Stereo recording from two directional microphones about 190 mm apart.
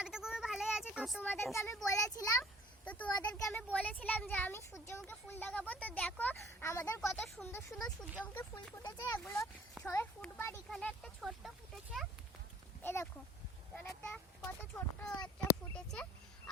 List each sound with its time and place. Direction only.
0.0 s a sound: 5° right (ahead or behind)
1.5 s speech: 15° left (ahead or behind)
2.4 s a sound: 5° left (ahead or behind)
3.3 s speech: 10° left (ahead or behind)
7.1 s speech: centre (ahead or behind)
12.8 s speech: 15° left (ahead or behind)